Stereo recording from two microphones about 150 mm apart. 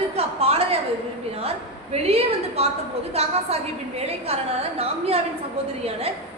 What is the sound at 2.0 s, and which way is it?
A woman's voice, 40° right (ahead or behind).